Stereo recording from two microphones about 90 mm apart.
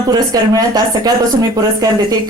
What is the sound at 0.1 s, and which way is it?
A woman's voice, 45° right (ahead or behind).